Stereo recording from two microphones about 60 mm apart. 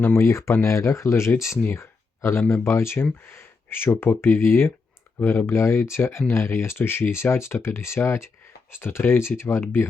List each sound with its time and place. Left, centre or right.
0.2 s speech: left
1.7 s a sound: left
2.5 s speech: left